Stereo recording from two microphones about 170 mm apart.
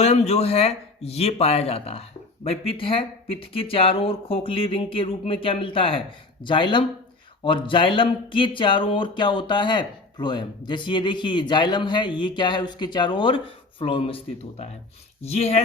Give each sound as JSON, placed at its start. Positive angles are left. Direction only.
{"t": 0.0, "sound": "speech", "side_deg": 40}